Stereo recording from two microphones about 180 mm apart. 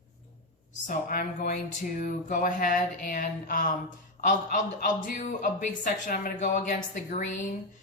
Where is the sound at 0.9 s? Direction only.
50° left (ahead or behind).